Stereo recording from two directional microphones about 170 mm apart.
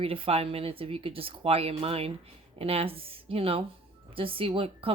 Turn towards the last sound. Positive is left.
turn(degrees=-35)  # may be behind; listen again after turning